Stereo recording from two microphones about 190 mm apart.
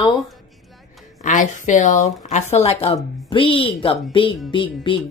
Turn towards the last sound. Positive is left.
turn(degrees=25)  # may be behind; listen again after turning